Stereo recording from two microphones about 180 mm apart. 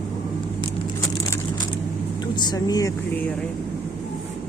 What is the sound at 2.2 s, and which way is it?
Speech, 25° left (ahead or behind).